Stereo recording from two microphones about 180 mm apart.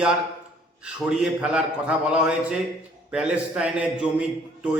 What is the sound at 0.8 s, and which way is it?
A man's voice, 5° right (ahead or behind).